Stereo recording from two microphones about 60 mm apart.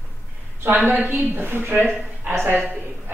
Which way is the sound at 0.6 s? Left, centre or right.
Right.